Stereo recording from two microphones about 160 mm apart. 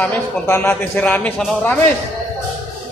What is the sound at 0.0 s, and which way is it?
A man's voice, 10° left (ahead or behind).